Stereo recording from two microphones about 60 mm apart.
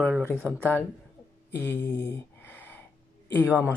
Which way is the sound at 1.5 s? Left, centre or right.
Left.